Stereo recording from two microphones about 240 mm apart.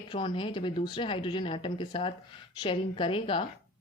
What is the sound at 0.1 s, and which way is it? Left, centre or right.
A woman's voice, centre.